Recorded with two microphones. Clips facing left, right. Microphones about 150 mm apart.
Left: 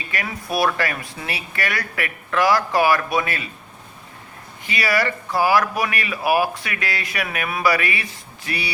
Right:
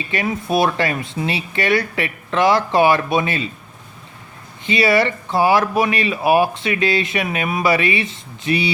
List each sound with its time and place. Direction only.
0.1 s speech: 25° right (ahead or behind)
4.6 s speech: 25° right (ahead or behind)